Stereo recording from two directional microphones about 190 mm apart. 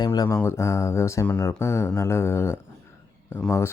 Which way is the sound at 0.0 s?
20° left (ahead or behind).